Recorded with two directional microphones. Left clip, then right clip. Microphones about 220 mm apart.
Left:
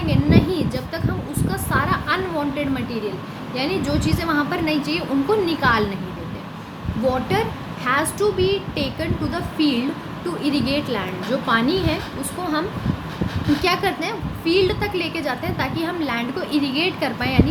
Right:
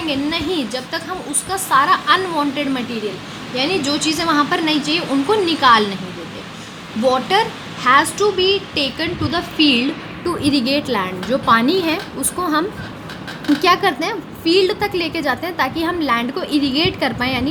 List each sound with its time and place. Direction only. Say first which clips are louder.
0.1 s a woman's voice: left 1 dB; 35° right (ahead or behind)
7.1 s a woman's voice: right 6 dB; 40° right (ahead or behind)
13.6 s a woman's voice: right 7 dB; 40° right (ahead or behind)